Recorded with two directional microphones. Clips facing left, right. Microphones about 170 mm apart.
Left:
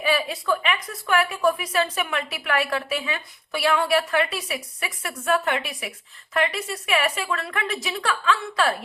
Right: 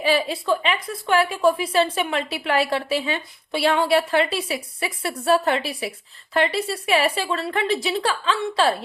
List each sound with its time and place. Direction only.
0.0 s a woman's voice: 30° right (ahead or behind)